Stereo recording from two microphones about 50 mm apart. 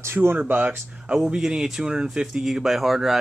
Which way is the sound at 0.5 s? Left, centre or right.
Right.